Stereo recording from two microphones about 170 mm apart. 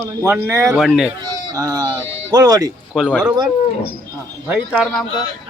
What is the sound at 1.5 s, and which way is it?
Speech, 20° right (ahead or behind).